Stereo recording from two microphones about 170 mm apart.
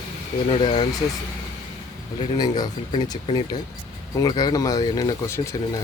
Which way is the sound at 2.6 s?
25° left (ahead or behind).